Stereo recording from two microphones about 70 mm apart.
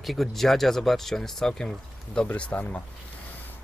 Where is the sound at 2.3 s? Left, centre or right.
Left.